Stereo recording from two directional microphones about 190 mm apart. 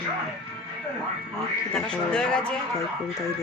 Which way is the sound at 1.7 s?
5° left (ahead or behind).